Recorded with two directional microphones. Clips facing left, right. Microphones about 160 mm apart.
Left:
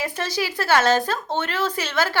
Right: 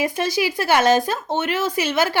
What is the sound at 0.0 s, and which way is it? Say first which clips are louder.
A woman's voice: right 5 dB; 15° right (ahead or behind).